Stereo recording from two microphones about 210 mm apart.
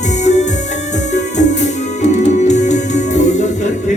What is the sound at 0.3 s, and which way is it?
Music, 35° left (ahead or behind).